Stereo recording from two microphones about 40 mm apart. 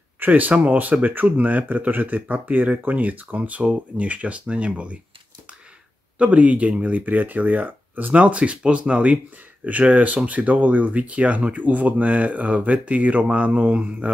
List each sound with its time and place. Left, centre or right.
0.2 s speech: right
6.1 s speech: right
8.1 s speech: right
9.7 s speech: right